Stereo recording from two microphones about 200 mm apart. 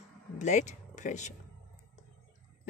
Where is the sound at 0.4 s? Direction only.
35° left (ahead or behind).